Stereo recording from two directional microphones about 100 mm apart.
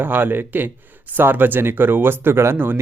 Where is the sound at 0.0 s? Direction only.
20° right (ahead or behind).